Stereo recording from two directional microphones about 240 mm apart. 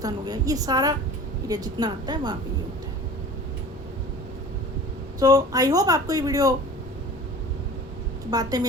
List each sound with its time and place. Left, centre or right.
0.0 s speech: centre
5.2 s speech: centre
8.3 s speech: centre